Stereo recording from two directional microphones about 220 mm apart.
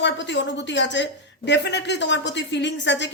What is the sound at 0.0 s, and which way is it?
A woman's voice, 55° left (ahead or behind).